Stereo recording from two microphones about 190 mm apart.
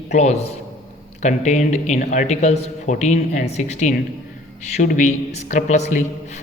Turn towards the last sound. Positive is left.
turn(degrees=40)  # may be behind; listen again after turning